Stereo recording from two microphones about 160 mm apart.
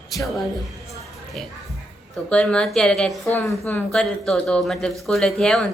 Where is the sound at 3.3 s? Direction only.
15° left (ahead or behind).